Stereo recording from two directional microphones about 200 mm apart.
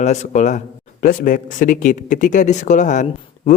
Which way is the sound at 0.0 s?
35° left (ahead or behind).